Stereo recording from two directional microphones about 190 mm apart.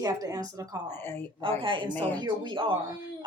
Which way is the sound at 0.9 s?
10° left (ahead or behind).